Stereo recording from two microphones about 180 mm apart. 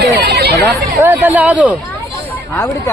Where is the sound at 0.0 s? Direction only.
65° right (ahead or behind).